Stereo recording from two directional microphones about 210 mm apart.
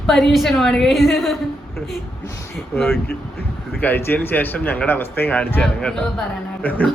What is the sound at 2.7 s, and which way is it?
A child's voice, 10° left (ahead or behind).